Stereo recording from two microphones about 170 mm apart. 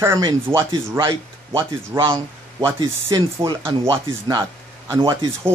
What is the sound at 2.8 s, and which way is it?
Speech, 25° right (ahead or behind).